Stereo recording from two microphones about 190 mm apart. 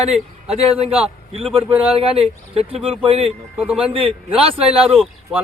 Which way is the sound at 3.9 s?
30° right (ahead or behind).